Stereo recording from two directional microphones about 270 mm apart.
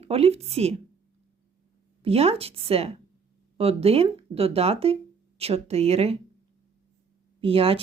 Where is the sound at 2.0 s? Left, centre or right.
Right.